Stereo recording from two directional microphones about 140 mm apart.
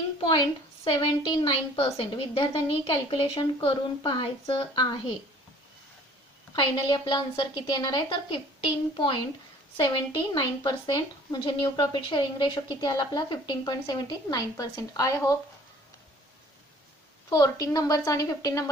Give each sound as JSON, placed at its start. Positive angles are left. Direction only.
{"t": 0.9, "sound": "a woman's voice", "side_deg": 35}
{"t": 6.6, "sound": "a woman's voice", "side_deg": 30}
{"t": 17.2, "sound": "a woman's voice", "side_deg": 25}